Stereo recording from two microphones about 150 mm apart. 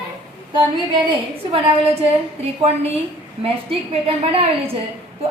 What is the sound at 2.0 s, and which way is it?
A woman's voice, 45° right (ahead or behind).